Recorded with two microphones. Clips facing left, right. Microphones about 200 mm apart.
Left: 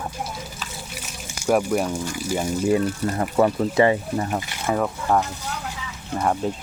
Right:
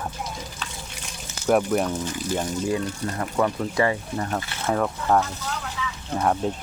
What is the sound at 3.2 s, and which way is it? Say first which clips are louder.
Speech: left 4 dB; 25° left (ahead or behind).